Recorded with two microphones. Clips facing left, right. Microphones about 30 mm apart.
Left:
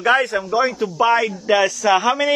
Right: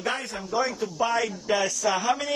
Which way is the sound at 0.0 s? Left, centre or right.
Left.